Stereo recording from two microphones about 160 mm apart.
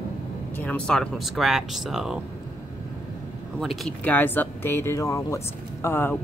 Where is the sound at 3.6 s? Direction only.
Centre (ahead or behind).